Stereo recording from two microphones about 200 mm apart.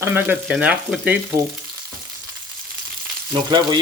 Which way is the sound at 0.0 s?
10° right (ahead or behind).